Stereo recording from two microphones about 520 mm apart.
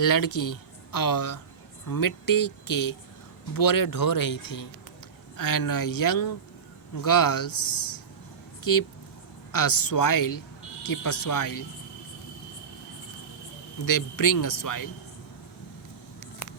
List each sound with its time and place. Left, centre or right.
0.0 s speech: left
8.7 s speech: left
13.8 s speech: left